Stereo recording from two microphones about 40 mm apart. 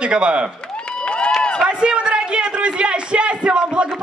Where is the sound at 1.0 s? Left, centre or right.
Left.